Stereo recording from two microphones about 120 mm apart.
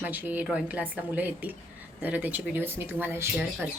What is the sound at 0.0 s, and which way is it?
Speech, 15° right (ahead or behind).